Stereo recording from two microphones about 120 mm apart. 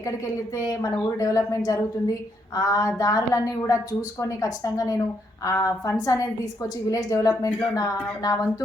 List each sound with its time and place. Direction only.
0.5 s speech: 30° left (ahead or behind)